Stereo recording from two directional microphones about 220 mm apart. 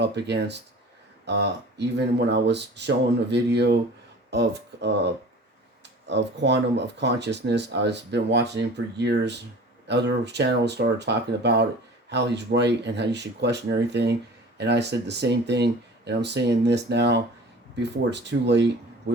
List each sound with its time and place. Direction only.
0.0 s speech: 50° right (ahead or behind)
6.1 s speech: 50° right (ahead or behind)